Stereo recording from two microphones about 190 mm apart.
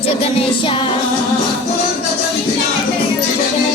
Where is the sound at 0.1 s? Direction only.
30° left (ahead or behind).